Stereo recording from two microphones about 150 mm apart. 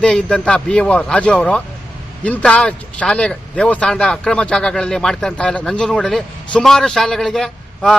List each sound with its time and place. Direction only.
0.0 s a man's voice: 5° left (ahead or behind)